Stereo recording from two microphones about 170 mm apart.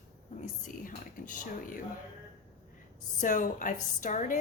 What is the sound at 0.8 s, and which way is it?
Speech, 50° left (ahead or behind).